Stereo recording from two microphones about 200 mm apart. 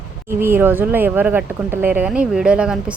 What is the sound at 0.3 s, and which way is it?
Speech, 10° right (ahead or behind).